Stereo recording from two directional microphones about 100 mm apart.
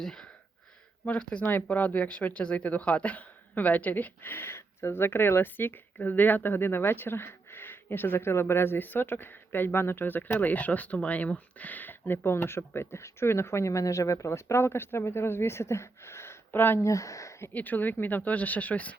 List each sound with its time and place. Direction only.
0.0 s a sound: 5° left (ahead or behind)
1.0 s speech: 15° left (ahead or behind); by 17.5 s 30° left (ahead or behind)
17.5 s speech: 20° left (ahead or behind)